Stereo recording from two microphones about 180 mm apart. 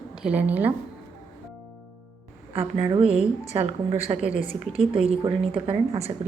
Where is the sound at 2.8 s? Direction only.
30° right (ahead or behind).